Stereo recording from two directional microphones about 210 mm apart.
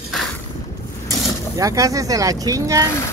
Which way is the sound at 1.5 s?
15° right (ahead or behind).